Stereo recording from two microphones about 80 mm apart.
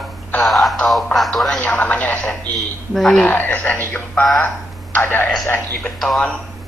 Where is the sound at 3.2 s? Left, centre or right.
Left.